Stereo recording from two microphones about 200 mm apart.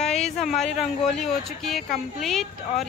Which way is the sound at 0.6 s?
Centre (ahead or behind).